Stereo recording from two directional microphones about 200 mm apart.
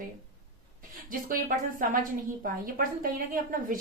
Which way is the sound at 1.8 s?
40° right (ahead or behind).